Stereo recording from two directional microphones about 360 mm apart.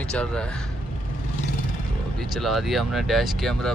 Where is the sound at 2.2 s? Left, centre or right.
Centre.